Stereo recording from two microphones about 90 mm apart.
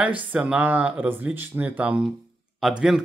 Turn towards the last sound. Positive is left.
turn(degrees=-5)  # may be behind; listen again after turning